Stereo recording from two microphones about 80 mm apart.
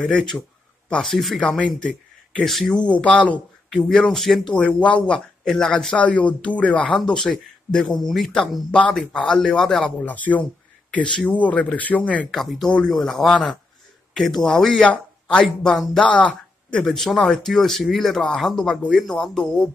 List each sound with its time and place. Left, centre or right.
0.0 s speech: centre
2.8 s speech: centre
3.7 s speech: centre
4.6 s speech: centre
5.4 s speech: centre
10.0 s speech: centre
12.3 s speech: centre
15.4 s speech: centre
16.2 s a sound: centre
16.8 s speech: centre